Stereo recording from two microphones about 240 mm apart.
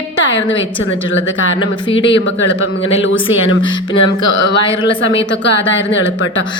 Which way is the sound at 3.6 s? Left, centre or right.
Centre.